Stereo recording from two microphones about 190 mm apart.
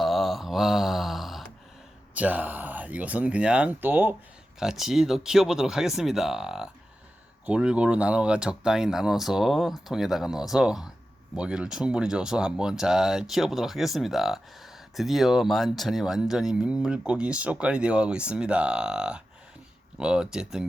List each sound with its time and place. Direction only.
0.0 s mantra: centre (ahead or behind)
2.1 s speech: 10° right (ahead or behind)